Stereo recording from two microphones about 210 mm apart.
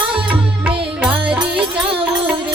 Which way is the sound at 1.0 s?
5° right (ahead or behind).